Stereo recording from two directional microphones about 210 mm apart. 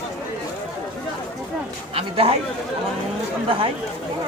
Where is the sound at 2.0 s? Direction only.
30° right (ahead or behind).